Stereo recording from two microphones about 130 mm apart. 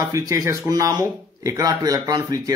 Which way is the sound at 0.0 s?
25° right (ahead or behind).